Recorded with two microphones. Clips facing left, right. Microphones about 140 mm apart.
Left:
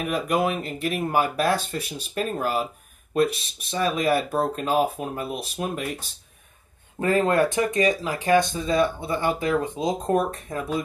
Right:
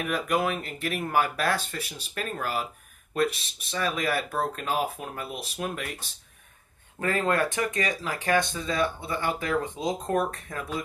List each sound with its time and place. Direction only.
0.0 s speech: 20° left (ahead or behind)
7.0 s speech: 25° left (ahead or behind)